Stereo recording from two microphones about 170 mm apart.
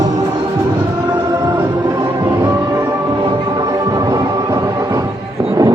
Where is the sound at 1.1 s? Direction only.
25° right (ahead or behind).